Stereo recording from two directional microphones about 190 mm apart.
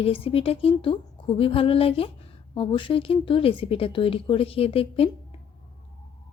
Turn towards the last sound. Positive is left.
turn(degrees=30)  # may be behind; listen again after turning